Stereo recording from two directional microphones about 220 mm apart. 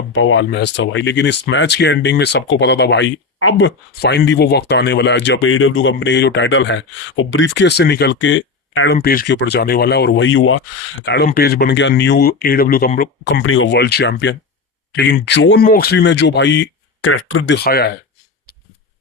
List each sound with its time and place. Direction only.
0.1 s speech: 60° left (ahead or behind)
11.0 s speech: 50° left (ahead or behind)
15.6 s speech: 40° left (ahead or behind)